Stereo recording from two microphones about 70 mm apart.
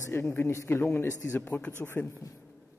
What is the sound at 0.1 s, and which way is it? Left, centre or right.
A man's voice, left.